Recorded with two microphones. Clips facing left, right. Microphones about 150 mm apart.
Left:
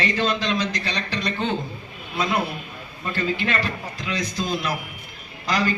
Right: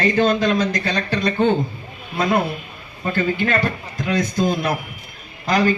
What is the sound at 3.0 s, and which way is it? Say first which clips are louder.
A man's voice: right 5 dB; 50° right (ahead or behind).